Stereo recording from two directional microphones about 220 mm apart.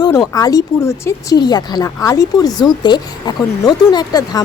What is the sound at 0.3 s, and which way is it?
Speech, 15° left (ahead or behind).